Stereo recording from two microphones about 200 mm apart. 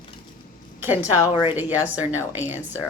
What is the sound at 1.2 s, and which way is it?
Speech, 25° left (ahead or behind).